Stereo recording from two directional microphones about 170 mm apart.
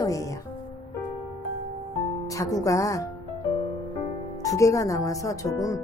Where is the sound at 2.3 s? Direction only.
20° left (ahead or behind).